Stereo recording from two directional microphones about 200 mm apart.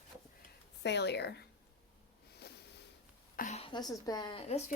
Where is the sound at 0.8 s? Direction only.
60° left (ahead or behind).